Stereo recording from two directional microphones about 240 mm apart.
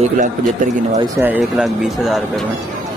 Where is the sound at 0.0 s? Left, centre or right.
Right.